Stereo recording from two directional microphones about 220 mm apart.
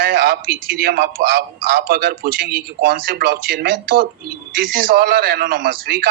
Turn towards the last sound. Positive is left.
turn(degrees=-45)  # may be behind; listen again after turning